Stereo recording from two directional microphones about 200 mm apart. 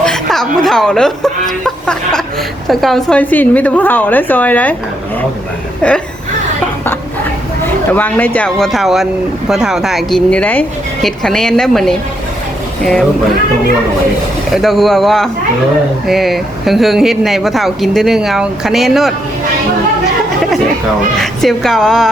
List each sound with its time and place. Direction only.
0.0 s a woman's voice: centre (ahead or behind)
5.8 s speech: 5° left (ahead or behind)
7.9 s speech: 10° left (ahead or behind)
14.5 s speech: centre (ahead or behind)
21.2 s speech: centre (ahead or behind)